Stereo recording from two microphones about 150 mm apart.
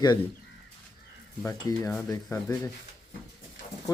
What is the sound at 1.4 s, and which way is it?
Speech, 15° left (ahead or behind).